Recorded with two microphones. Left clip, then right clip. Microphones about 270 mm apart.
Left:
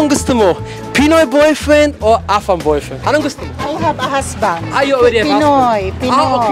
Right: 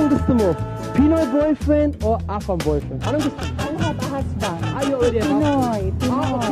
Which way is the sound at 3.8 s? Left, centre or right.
Centre.